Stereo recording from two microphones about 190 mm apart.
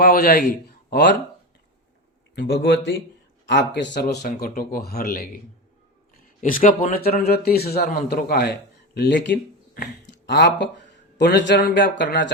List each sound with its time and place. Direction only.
0.0 s a man's voice: 55° left (ahead or behind)
2.3 s a man's voice: 65° left (ahead or behind)
4.0 s speech: 55° left (ahead or behind)
6.4 s speech: 45° left (ahead or behind); by 12.0 s 65° left (ahead or behind)